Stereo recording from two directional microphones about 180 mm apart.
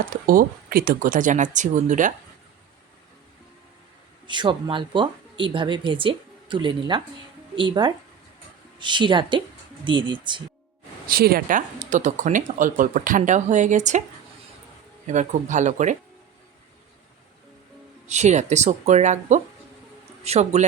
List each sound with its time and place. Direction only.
0.0 s speech: 50° right (ahead or behind)
4.3 s speech: 25° right (ahead or behind)
11.0 s speech: 55° right (ahead or behind)
15.0 s speech: 40° right (ahead or behind)
18.1 s speech: 40° right (ahead or behind)